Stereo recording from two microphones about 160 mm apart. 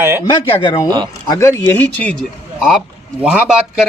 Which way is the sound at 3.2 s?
5° right (ahead or behind).